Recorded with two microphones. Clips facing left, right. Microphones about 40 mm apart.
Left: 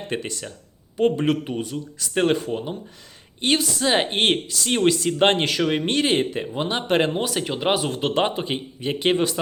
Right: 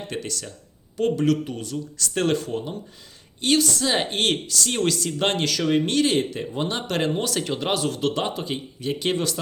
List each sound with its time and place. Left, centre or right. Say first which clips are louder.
0.1 s speech: left 3 dB; left